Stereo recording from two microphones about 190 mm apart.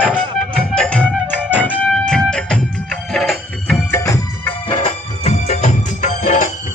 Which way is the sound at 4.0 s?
15° left (ahead or behind).